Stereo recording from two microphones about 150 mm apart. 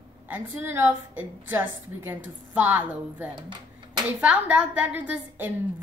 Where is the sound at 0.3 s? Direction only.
15° right (ahead or behind).